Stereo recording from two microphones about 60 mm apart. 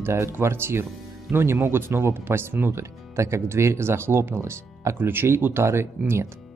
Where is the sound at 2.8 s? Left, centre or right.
Right.